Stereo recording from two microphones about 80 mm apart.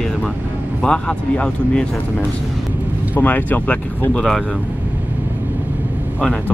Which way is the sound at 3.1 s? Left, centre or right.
Left.